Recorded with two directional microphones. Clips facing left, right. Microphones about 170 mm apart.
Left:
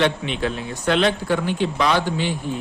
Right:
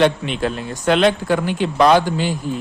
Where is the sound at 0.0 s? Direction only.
45° right (ahead or behind).